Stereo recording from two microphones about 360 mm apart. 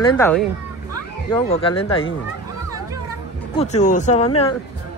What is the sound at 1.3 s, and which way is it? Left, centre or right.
Speech, centre.